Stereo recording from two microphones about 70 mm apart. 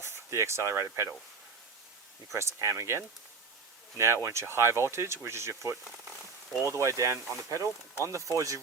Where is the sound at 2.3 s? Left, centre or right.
Right.